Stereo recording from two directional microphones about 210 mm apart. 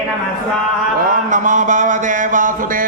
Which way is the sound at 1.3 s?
35° right (ahead or behind).